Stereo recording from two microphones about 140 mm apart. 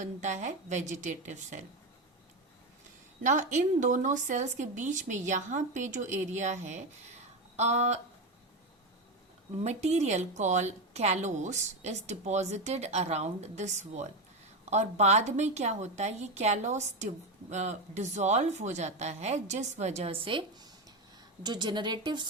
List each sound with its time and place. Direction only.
0.0 s a woman's voice: 60° right (ahead or behind)
3.2 s a woman's voice: 65° right (ahead or behind)
7.5 s a sound: 55° right (ahead or behind)
9.6 s a woman's voice: 50° right (ahead or behind); by 22.3 s 30° right (ahead or behind)